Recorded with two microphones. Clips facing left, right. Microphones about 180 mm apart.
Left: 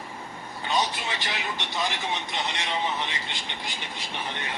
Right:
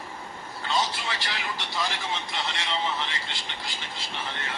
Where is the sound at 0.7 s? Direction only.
20° left (ahead or behind).